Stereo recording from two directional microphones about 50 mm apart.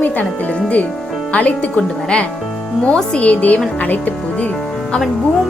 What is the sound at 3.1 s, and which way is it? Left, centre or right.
Speech, left.